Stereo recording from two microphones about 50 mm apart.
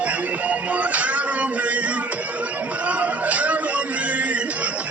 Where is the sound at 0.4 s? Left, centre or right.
Right.